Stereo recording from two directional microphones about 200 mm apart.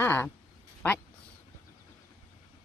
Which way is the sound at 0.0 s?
10° left (ahead or behind).